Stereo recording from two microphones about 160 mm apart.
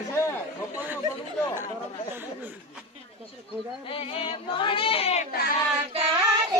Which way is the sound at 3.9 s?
35° left (ahead or behind).